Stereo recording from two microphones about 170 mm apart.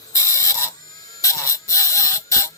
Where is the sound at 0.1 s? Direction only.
15° left (ahead or behind).